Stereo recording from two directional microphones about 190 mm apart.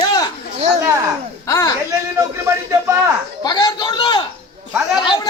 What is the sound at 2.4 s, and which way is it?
Speech, 15° right (ahead or behind).